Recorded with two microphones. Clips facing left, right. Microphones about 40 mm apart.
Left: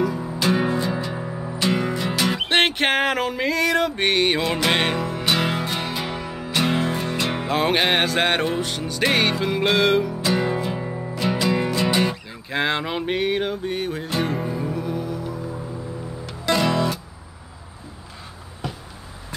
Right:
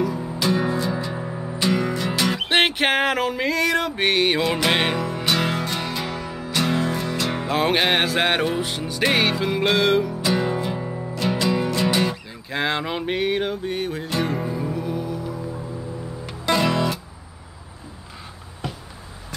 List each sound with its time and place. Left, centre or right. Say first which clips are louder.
0.0 s music: left 1 dB; centre
0.4 s music: left 1 dB; centre
0.8 s music: even; centre
7.4 s music: even; centre
16.4 s music: even; centre
18.6 s a sound: even; centre